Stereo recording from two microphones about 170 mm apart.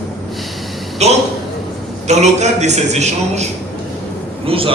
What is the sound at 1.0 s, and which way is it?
A man's voice, 40° right (ahead or behind).